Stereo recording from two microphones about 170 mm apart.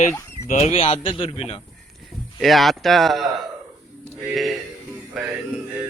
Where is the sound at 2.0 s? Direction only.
Centre (ahead or behind).